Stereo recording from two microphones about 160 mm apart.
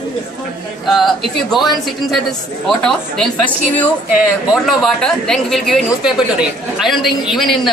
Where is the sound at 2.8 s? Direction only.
5° left (ahead or behind).